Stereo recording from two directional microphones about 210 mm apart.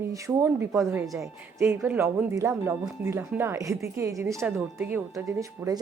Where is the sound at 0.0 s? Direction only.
15° right (ahead or behind).